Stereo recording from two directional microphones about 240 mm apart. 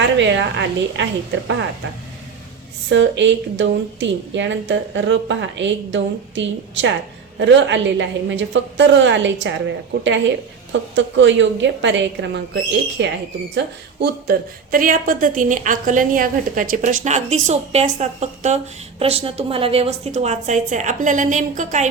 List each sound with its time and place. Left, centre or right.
0.0 s a woman's voice: right
2.9 s a woman's voice: right